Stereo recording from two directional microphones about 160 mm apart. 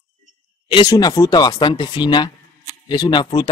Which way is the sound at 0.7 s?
25° left (ahead or behind).